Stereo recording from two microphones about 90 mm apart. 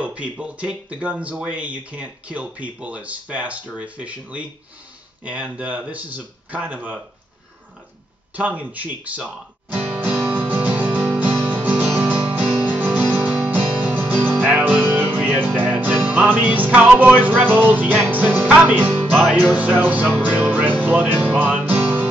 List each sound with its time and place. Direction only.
0.0 s speech: 15° right (ahead or behind)
8.4 s guitar: 15° right (ahead or behind)
13.1 s music: 20° right (ahead or behind)
19.0 s speech: 20° right (ahead or behind)
20.2 s music: 15° right (ahead or behind)